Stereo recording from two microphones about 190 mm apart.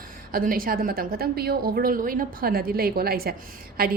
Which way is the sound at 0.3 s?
50° right (ahead or behind).